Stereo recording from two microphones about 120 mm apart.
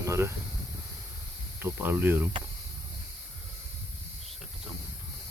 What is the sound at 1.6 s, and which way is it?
Speech, 20° right (ahead or behind).